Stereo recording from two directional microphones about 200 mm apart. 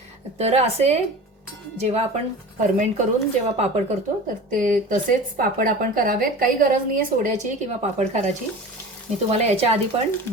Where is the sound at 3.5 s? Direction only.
30° right (ahead or behind).